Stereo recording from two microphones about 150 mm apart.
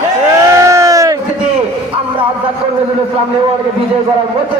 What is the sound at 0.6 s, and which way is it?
Crowd, 20° right (ahead or behind).